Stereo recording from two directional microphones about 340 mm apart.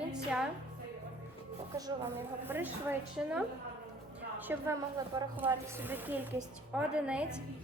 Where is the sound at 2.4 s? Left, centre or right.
Centre.